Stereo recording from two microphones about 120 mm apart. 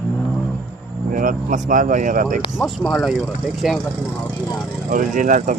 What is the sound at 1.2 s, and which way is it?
Speech, 90° right.